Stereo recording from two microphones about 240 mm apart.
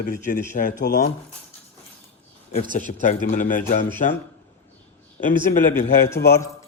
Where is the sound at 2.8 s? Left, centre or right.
Left.